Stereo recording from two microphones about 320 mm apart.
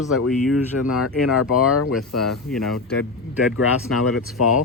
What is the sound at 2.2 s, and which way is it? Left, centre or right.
Speech, centre.